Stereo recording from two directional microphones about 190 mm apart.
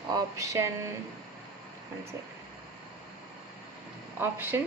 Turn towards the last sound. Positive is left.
turn(degrees=-10)  # may be behind; listen again after turning